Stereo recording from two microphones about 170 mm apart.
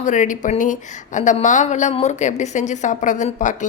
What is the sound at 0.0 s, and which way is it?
A woman's voice, 45° left (ahead or behind).